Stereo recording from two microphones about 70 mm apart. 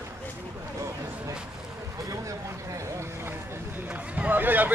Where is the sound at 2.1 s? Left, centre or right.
Right.